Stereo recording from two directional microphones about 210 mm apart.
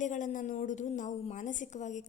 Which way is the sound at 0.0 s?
35° left (ahead or behind).